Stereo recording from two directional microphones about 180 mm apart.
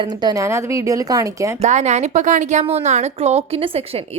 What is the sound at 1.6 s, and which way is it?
Speech, 40° right (ahead or behind).